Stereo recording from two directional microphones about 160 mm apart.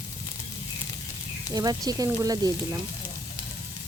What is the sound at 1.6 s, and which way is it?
Speech, 25° right (ahead or behind).